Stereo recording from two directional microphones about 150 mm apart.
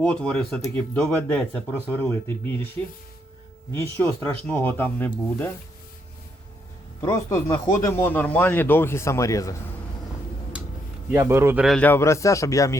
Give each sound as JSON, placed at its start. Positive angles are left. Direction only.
{"t": 0.0, "sound": "speech", "side_deg": 5}
{"t": 7.0, "sound": "speech", "side_deg": 15}
{"t": 11.1, "sound": "speech", "side_deg": -15}
{"t": 11.6, "sound": "speech", "side_deg": 0}
{"t": 11.9, "sound": "speech", "side_deg": 20}